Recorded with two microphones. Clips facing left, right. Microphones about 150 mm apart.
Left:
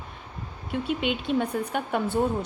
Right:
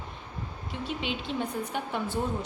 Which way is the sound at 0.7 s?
55° left (ahead or behind).